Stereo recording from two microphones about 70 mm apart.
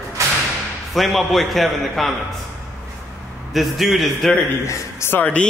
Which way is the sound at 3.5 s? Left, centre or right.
Centre.